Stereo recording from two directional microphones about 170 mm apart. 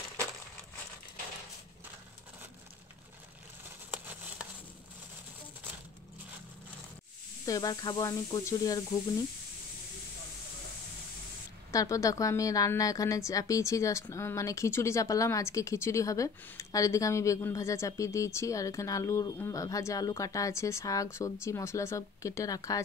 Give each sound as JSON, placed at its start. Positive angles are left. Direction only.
{"t": 3.9, "sound": "a sound", "side_deg": -10}
{"t": 7.4, "sound": "a woman's voice", "side_deg": 20}
{"t": 11.7, "sound": "a woman's voice", "side_deg": 20}